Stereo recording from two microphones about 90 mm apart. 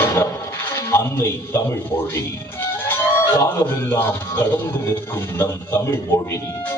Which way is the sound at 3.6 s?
25° left (ahead or behind).